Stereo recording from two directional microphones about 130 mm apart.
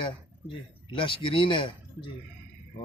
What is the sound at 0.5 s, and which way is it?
Speech, 40° left (ahead or behind).